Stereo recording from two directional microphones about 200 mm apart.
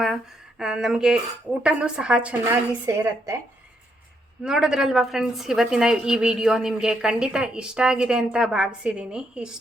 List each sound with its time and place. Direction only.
0.6 s a woman's voice: 5° right (ahead or behind)
4.4 s a woman's voice: 5° right (ahead or behind)